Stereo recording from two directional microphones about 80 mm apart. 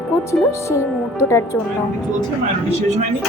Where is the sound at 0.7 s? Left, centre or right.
Left.